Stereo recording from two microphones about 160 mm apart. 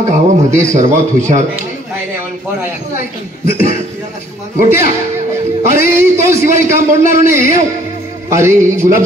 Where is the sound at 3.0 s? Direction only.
75° left (ahead or behind).